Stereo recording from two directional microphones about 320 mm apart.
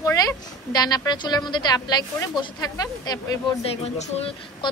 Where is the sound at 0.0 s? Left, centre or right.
Centre.